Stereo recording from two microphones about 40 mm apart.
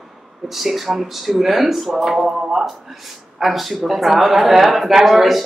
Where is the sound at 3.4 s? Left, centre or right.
Centre.